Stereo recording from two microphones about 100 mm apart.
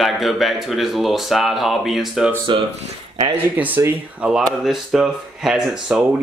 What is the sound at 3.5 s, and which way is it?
Speech, 15° right (ahead or behind).